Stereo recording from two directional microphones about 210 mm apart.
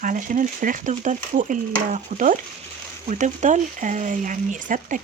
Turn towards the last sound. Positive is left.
turn(degrees=-40)  # may be behind; listen again after turning